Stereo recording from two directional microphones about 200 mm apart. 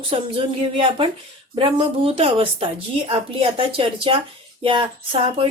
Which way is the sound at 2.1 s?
25° right (ahead or behind).